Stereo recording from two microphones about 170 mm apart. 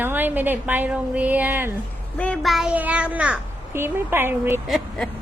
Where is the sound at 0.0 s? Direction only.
10° right (ahead or behind).